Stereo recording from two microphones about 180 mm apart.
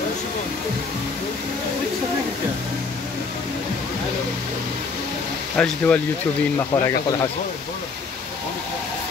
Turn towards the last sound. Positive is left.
turn(degrees=20)  # may be behind; listen again after turning